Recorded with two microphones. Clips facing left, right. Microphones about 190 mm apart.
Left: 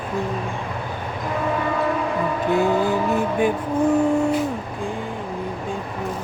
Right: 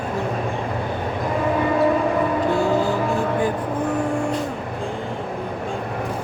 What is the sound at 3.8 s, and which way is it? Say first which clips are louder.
Vehicle: left 6 dB; 10° left (ahead or behind).